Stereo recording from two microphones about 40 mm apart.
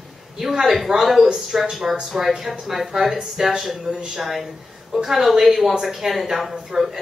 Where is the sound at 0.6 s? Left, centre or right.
Centre.